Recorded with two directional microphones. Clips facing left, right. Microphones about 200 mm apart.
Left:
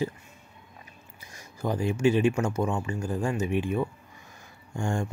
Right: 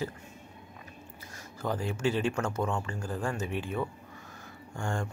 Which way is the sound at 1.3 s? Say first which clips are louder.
Left 3 dB; 15° left (ahead or behind).